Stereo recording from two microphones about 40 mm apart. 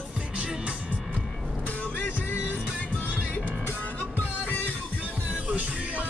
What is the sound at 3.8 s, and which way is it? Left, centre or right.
Music, left.